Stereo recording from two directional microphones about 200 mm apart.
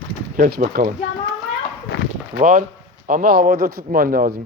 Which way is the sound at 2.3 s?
40° right (ahead or behind).